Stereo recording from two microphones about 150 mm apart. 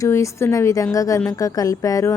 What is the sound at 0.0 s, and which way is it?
Speech, 20° left (ahead or behind).